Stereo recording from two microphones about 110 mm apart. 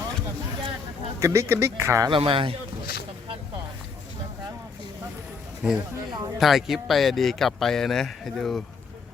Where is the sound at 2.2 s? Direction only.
55° right (ahead or behind).